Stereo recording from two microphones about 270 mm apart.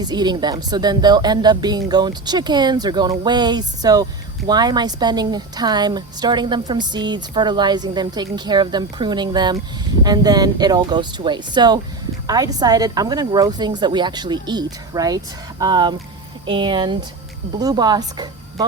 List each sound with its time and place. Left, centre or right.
0.0 s a woman's voice: centre